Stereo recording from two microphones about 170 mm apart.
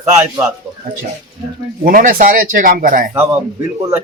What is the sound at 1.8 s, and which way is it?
Speech, 55° right (ahead or behind).